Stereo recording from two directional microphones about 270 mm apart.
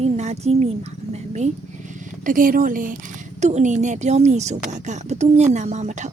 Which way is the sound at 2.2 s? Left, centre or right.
Right.